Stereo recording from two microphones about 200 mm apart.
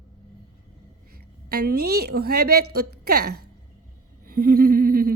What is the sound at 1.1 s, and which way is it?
A woman's voice, 50° right (ahead or behind).